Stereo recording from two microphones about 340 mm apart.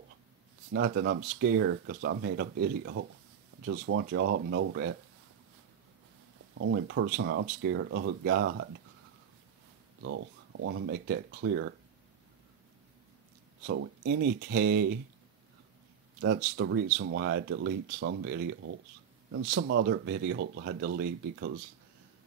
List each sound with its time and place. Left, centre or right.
0.7 s speech: right
6.5 s speech: right
10.0 s speech: right
13.7 s speech: right
16.2 s speech: right